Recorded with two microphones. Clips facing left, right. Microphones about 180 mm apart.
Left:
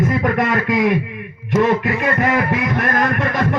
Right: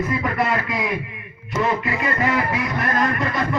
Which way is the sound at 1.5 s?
90° left.